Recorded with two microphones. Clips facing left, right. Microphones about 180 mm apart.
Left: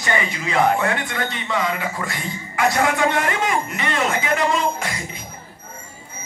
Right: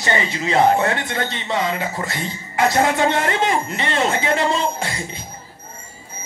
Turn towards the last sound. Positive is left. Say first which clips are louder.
# even
turn(degrees=-30)  # may be behind; listen again after turning